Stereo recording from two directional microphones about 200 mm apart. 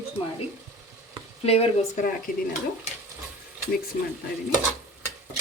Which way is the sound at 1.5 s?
30° left (ahead or behind).